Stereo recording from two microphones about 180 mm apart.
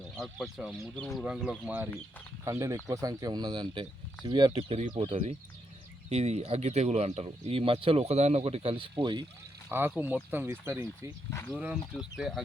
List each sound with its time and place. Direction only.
0.2 s speech: centre (ahead or behind); by 9.2 s 25° right (ahead or behind)
9.6 s speech: 10° right (ahead or behind)
11.3 s speech: 15° left (ahead or behind)
11.5 s speech: 5° right (ahead or behind)